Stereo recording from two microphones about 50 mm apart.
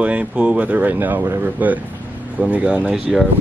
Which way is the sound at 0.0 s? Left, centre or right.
Right.